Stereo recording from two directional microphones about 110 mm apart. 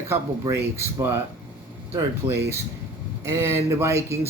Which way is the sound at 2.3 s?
25° right (ahead or behind).